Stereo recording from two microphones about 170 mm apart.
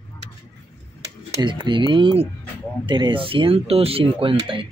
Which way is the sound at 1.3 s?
30° right (ahead or behind).